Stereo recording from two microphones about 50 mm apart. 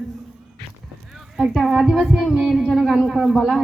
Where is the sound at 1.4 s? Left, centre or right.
Centre.